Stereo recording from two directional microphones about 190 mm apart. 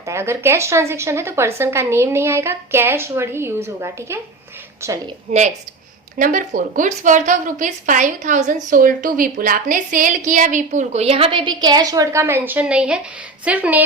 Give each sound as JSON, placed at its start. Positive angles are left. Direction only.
{"t": 0.0, "sound": "speech", "side_deg": -15}
{"t": 6.1, "sound": "a woman's voice", "side_deg": -45}